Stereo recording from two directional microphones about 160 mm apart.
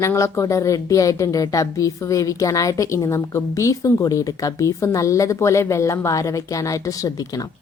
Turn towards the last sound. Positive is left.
turn(degrees=20)  # may be behind; listen again after turning